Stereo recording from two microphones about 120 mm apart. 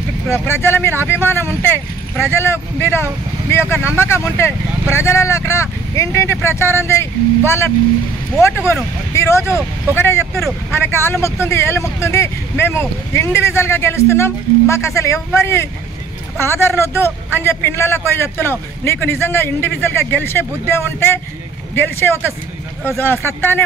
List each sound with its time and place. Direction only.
0.3 s speech: 20° left (ahead or behind)
9.1 s speech: 25° left (ahead or behind)